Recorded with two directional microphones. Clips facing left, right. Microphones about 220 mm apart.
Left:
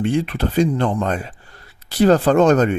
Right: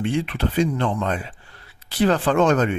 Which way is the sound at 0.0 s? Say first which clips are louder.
Left 3 dB; 40° left (ahead or behind).